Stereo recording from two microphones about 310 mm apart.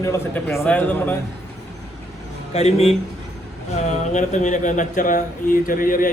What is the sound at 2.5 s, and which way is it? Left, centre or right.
Speech, left.